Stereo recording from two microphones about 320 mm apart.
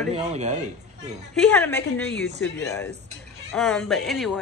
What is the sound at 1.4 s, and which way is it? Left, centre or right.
Speech, centre.